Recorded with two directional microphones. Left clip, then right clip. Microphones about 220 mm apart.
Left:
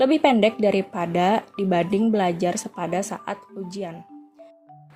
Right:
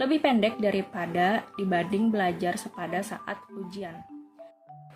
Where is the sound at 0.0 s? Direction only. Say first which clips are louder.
Left 6 dB; 25° left (ahead or behind).